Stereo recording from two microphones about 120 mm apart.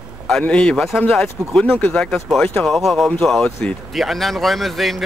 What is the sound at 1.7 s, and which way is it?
Speech, 15° left (ahead or behind).